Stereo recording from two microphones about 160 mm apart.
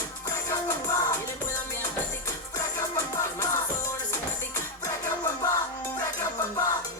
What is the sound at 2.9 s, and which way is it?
Music, 20° left (ahead or behind).